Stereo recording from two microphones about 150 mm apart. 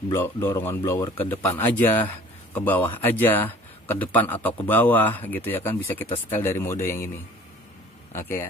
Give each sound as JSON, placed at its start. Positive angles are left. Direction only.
{"t": 0.1, "sound": "a man's voice", "side_deg": 15}
{"t": 8.1, "sound": "a man's voice", "side_deg": 15}